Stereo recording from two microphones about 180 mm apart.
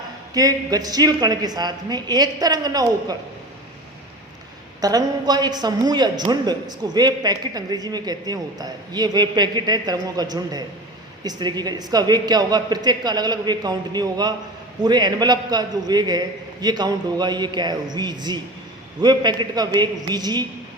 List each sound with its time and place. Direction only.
0.3 s a woman's voice: 20° right (ahead or behind)
4.8 s a woman's voice: 20° right (ahead or behind)